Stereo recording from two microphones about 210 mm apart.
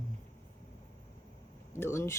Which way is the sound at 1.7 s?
10° left (ahead or behind).